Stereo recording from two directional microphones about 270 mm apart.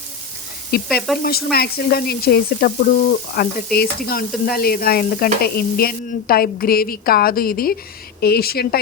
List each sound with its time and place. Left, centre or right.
0.7 s sizzle: left